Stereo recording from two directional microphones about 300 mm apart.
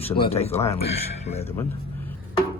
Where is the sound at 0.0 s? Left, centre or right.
Centre.